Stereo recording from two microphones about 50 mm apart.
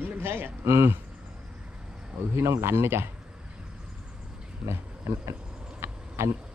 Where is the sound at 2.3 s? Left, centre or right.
Right.